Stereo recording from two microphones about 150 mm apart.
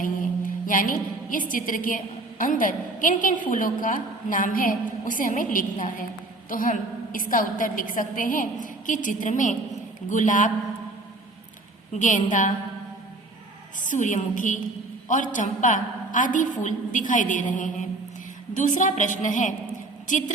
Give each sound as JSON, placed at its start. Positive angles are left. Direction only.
{"t": 0.0, "sound": "a woman's voice", "side_deg": 65}
{"t": 11.9, "sound": "a woman's voice", "side_deg": 60}
{"t": 13.8, "sound": "a woman's voice", "side_deg": 55}